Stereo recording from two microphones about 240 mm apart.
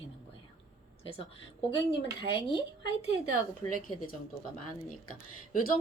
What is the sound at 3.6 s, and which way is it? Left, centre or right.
Speech, left.